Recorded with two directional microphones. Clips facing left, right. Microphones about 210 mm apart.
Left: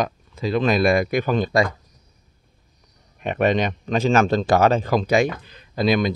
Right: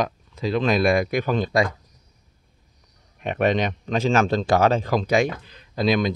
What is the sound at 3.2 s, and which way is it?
Speech, centre (ahead or behind).